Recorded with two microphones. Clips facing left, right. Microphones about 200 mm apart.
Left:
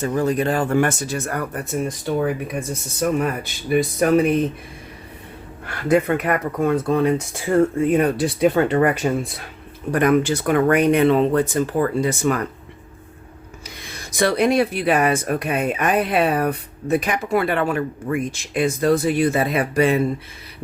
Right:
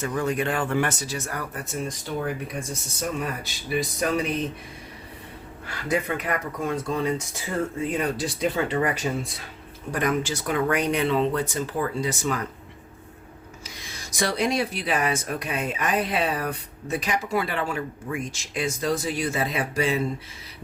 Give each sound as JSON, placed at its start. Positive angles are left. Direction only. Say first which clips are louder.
{"t": 0.0, "sound": "speech", "louder": "left 6 dB", "side_deg": 35}
{"t": 5.6, "sound": "speech", "louder": "left 8 dB", "side_deg": 60}
{"t": 13.7, "sound": "speech", "louder": "left 6 dB", "side_deg": 60}